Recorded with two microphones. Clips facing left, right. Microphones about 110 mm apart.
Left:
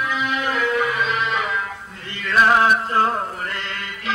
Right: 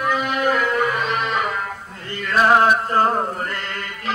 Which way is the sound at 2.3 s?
40° right (ahead or behind).